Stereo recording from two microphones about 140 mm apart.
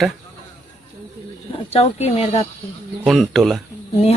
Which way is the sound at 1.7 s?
45° left (ahead or behind).